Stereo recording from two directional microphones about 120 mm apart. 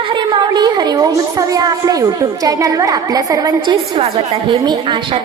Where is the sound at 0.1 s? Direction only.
40° right (ahead or behind).